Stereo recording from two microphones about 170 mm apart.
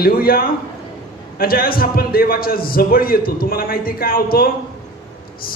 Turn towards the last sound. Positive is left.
turn(degrees=60)  # may be behind; listen again after turning